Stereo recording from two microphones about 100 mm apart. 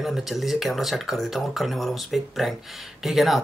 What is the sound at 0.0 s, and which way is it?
Speech, centre (ahead or behind).